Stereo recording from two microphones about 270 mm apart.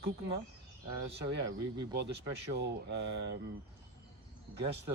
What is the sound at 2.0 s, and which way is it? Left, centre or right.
Speech, right.